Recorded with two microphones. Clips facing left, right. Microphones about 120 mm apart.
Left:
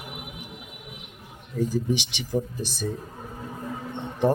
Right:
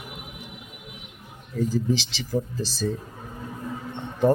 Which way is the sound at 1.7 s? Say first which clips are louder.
Right 1 dB; 15° left (ahead or behind).